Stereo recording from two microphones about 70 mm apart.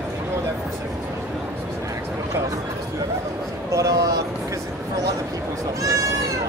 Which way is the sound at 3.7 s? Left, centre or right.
Right.